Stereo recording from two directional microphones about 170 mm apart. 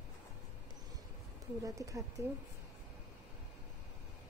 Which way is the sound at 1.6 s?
20° right (ahead or behind).